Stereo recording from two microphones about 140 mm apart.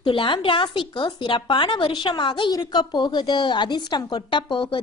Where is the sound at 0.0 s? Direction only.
40° left (ahead or behind).